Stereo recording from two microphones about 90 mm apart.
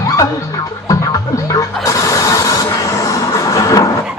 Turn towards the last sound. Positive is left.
turn(degrees=40)  # may be behind; listen again after turning